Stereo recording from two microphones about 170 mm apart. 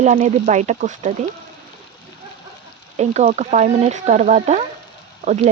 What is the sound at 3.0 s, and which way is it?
Speech, 40° right (ahead or behind).